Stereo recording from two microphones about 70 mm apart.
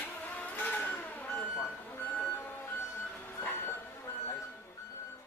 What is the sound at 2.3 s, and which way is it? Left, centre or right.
Music, left.